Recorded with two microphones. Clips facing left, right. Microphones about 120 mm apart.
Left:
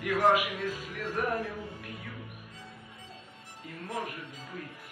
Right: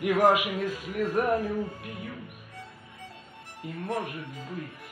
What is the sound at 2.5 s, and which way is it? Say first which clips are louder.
Music: right 3 dB; 60° right (ahead or behind).